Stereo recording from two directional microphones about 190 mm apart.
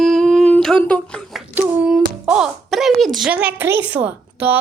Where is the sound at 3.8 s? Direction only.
10° right (ahead or behind).